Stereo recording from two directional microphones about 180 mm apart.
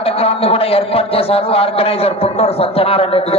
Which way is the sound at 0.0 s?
35° left (ahead or behind).